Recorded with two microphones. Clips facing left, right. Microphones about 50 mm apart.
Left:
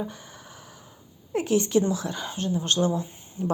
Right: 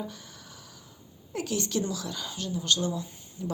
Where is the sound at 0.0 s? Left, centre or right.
Left.